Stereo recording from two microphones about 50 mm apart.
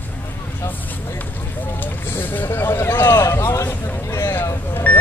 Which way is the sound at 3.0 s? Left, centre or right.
Left.